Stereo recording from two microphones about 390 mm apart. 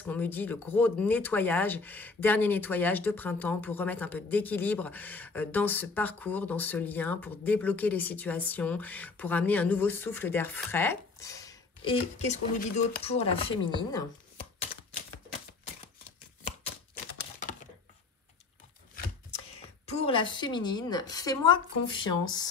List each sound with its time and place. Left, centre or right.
0.0 s speech: centre
14.6 s typewriter: centre
19.9 s a woman's voice: centre